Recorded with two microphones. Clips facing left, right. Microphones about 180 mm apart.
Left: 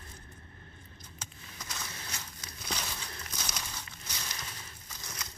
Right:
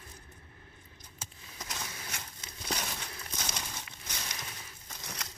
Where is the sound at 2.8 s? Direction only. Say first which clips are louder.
Right 1 dB; 25° right (ahead or behind).